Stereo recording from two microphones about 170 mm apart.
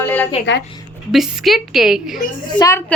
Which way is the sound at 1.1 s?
Centre (ahead or behind).